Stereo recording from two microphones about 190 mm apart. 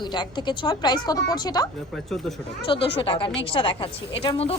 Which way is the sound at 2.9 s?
25° left (ahead or behind).